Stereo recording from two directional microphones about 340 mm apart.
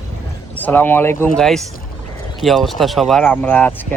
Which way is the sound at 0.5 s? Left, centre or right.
Centre.